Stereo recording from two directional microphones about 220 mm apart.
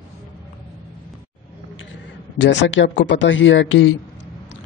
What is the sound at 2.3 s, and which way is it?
A man's voice, 55° left (ahead or behind).